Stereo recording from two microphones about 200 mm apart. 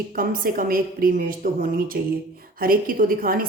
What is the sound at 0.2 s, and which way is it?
Speech, 45° right (ahead or behind).